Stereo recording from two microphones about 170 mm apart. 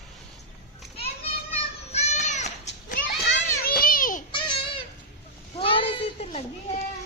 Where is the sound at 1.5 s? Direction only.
40° left (ahead or behind).